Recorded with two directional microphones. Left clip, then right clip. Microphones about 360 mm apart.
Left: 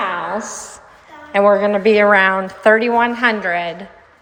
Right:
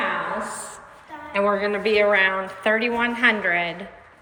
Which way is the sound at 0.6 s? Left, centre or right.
Left.